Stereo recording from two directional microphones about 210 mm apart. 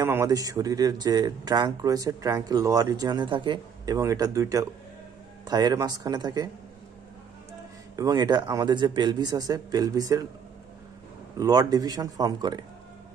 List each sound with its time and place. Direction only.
0.0 s speech: 15° right (ahead or behind)
7.9 s speech: 20° right (ahead or behind)
11.3 s speech: 15° right (ahead or behind)